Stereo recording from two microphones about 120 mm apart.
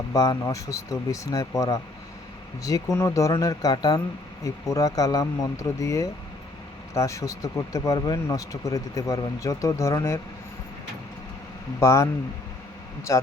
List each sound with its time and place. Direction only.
0.1 s speech: 30° left (ahead or behind)
11.8 s speech: 25° left (ahead or behind)
13.1 s speech: 25° left (ahead or behind)